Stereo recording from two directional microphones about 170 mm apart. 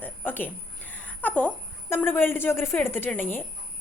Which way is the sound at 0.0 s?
10° left (ahead or behind).